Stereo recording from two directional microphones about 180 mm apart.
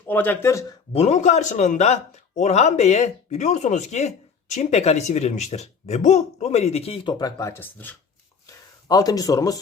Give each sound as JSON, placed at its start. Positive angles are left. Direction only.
{"t": 0.0, "sound": "speech", "side_deg": 10}
{"t": 0.9, "sound": "a man's voice", "side_deg": 40}
{"t": 8.4, "sound": "a sound", "side_deg": 20}